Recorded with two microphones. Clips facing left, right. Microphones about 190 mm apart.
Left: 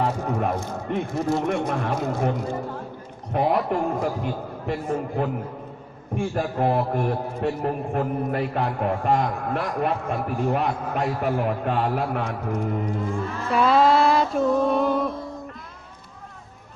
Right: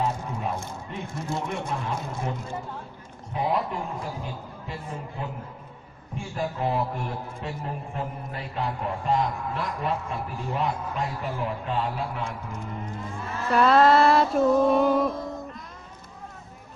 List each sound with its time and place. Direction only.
0.0 s a man's voice: 65° left (ahead or behind)
3.3 s a man's voice: 60° left (ahead or behind)
6.3 s a man's voice: 55° left (ahead or behind)
13.5 s music: centre (ahead or behind)